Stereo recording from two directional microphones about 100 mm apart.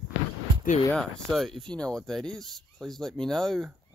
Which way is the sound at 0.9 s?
5° left (ahead or behind).